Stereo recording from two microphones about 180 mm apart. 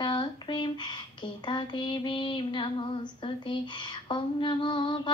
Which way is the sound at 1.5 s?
25° left (ahead or behind).